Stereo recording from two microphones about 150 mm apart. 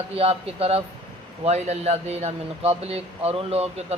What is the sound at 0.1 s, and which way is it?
Speech, 40° right (ahead or behind).